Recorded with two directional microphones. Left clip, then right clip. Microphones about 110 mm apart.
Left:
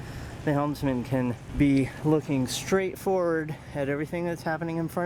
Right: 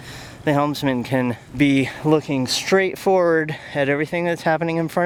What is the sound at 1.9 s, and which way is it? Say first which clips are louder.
Speech: right 7 dB; 50° right (ahead or behind).